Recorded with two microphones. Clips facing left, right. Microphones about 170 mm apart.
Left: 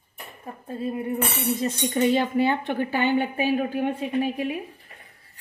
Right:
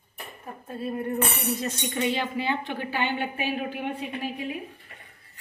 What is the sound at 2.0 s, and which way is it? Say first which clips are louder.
A woman's voice: left 7 dB; 45° left (ahead or behind).